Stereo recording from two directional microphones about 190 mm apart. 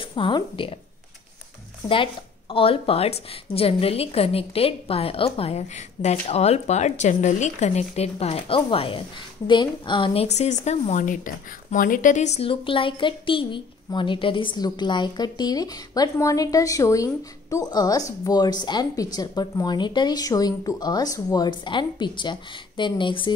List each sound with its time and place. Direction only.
0.1 s a woman's voice: 25° left (ahead or behind)
2.5 s a woman's voice: 30° left (ahead or behind)